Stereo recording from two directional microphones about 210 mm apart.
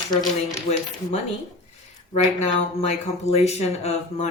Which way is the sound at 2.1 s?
30° left (ahead or behind).